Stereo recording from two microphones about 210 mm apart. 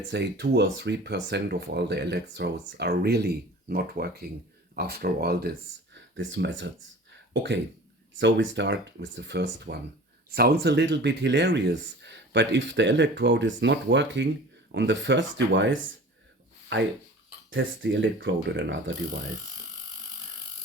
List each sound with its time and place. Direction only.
0.1 s speech: 55° right (ahead or behind)
8.2 s speech: 60° right (ahead or behind)
17.5 s speech: 65° right (ahead or behind)